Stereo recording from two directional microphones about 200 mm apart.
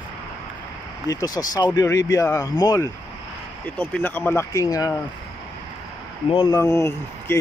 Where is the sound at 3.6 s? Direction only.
5° left (ahead or behind).